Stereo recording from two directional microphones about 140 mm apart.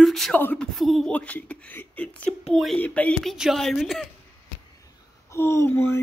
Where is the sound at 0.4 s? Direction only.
10° left (ahead or behind).